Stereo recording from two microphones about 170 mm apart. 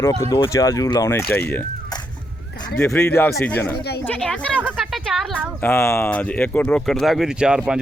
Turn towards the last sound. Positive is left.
turn(degrees=-5)  # may be behind; listen again after turning